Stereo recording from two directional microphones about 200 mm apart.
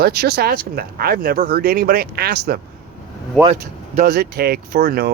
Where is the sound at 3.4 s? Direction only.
30° right (ahead or behind).